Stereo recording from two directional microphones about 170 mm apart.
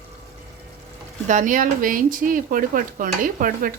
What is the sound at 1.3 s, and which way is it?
Speech, 50° right (ahead or behind).